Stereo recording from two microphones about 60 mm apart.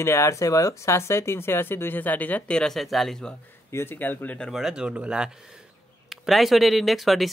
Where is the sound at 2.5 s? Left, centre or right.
Centre.